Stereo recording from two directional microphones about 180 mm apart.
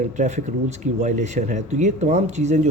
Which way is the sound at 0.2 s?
40° right (ahead or behind).